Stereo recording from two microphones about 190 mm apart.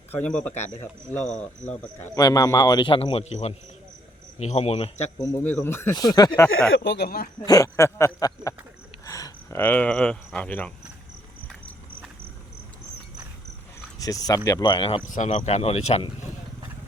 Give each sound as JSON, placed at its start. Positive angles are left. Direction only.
{"t": 0.1, "sound": "speech", "side_deg": 5}
{"t": 2.1, "sound": "a man's voice", "side_deg": 20}
{"t": 5.2, "sound": "speech", "side_deg": 10}
{"t": 6.5, "sound": "speech", "side_deg": 80}
{"t": 7.4, "sound": "speech", "side_deg": 20}
{"t": 14.0, "sound": "a man's voice", "side_deg": 20}
{"t": 15.0, "sound": "speech", "side_deg": 40}